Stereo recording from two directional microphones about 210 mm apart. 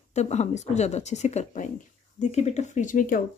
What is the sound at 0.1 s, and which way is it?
Speech, 30° left (ahead or behind).